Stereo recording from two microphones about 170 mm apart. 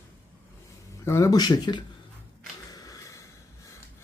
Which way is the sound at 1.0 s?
15° left (ahead or behind).